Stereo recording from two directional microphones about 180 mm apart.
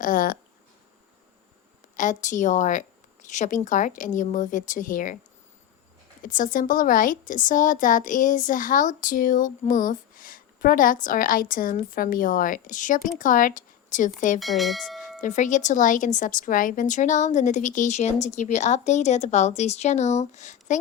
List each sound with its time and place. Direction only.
0.0 s speech: 50° left (ahead or behind)
2.0 s speech: 45° left (ahead or behind)
6.2 s speech: 50° left (ahead or behind)
14.3 s speech: centre (ahead or behind)
15.2 s a woman's voice: 45° left (ahead or behind)